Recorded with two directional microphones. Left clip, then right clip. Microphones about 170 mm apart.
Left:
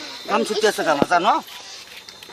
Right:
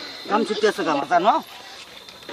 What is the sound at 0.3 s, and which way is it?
Speech, 20° right (ahead or behind).